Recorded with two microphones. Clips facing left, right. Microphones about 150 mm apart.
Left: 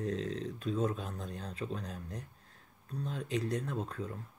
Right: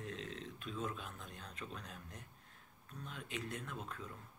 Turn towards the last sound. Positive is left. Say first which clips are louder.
# left 9 dB
turn(degrees=35)  # may be behind; listen again after turning